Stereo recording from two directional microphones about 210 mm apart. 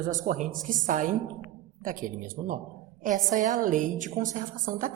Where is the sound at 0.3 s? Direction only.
40° right (ahead or behind).